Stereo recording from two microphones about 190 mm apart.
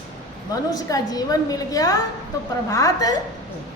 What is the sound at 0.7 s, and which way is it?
A woman's voice, 20° left (ahead or behind).